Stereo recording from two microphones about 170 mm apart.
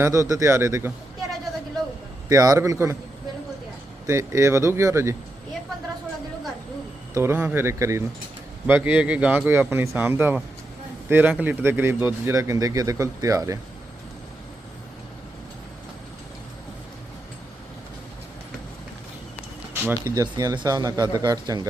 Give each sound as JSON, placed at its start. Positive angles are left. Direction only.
{"t": 0.0, "sound": "speech", "side_deg": -20}
{"t": 2.3, "sound": "speech", "side_deg": -20}
{"t": 4.0, "sound": "speech", "side_deg": -20}
{"t": 7.1, "sound": "speech", "side_deg": -15}
{"t": 19.7, "sound": "speech", "side_deg": -15}
{"t": 20.3, "sound": "speech", "side_deg": -25}